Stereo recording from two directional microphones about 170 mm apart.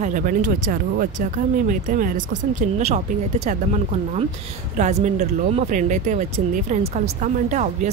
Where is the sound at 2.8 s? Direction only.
40° right (ahead or behind).